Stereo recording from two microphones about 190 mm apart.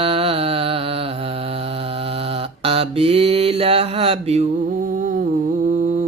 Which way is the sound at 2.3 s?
30° right (ahead or behind).